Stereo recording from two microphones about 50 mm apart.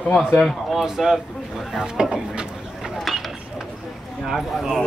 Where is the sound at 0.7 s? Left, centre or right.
Centre.